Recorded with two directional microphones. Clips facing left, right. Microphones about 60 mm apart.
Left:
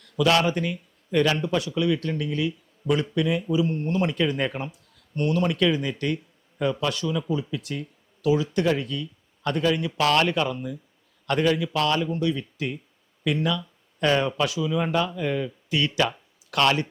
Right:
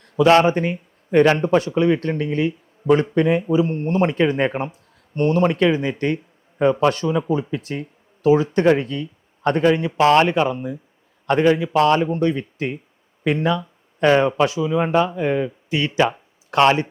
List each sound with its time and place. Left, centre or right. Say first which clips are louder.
0.0 s speech: right 7 dB; right